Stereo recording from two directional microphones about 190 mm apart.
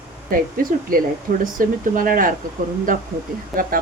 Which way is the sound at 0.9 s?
50° right (ahead or behind).